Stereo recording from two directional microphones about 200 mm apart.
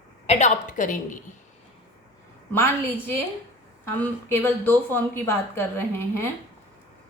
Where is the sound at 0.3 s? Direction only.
35° left (ahead or behind).